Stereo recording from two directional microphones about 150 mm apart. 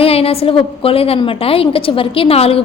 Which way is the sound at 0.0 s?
40° left (ahead or behind).